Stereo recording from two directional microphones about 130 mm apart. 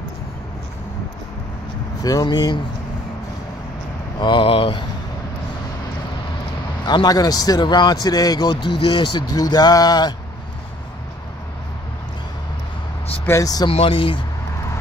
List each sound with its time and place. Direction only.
2.0 s a man's voice: 30° left (ahead or behind)
4.2 s a man's voice: 40° left (ahead or behind)
6.8 s a man's voice: 35° left (ahead or behind)
13.2 s speech: 25° left (ahead or behind)
13.7 s speech: 45° left (ahead or behind)